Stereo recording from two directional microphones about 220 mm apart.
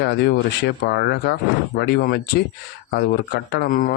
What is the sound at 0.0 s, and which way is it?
Speech, 45° left (ahead or behind).